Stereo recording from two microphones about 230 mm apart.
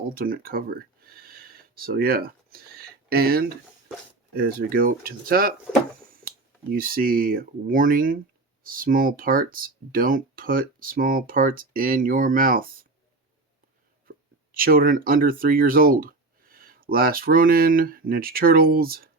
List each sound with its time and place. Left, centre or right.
0.0 s speech: right
6.7 s speech: right
14.5 s speech: right